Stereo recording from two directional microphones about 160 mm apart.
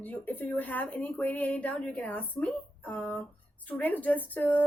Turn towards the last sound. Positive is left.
turn(degrees=10)  # may be behind; listen again after turning